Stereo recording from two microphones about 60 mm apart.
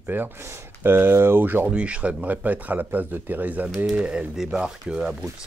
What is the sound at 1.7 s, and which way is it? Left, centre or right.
Speech, centre.